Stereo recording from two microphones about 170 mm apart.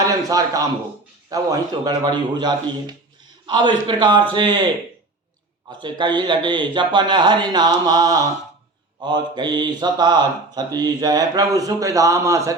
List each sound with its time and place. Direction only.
0.0 s a man's voice: 20° right (ahead or behind)
1.3 s mantra: 20° right (ahead or behind)
5.8 s mantra: 25° right (ahead or behind)